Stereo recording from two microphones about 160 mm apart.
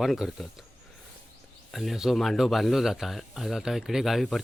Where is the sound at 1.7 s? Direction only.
Centre (ahead or behind).